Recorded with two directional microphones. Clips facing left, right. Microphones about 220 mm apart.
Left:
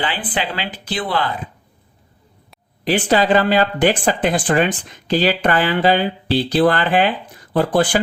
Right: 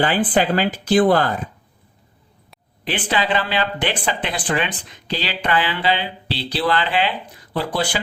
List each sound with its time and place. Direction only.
0.0 s speech: 45° right (ahead or behind)
2.8 s speech: 45° left (ahead or behind)